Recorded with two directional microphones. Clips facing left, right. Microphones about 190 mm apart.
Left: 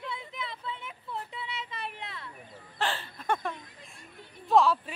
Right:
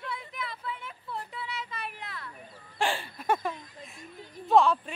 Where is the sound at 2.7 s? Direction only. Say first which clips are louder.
Right 3 dB; 10° right (ahead or behind).